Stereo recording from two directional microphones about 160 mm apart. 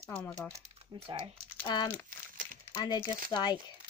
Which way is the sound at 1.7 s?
25° left (ahead or behind).